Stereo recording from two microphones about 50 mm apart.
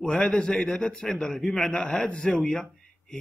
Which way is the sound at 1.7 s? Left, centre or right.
Left.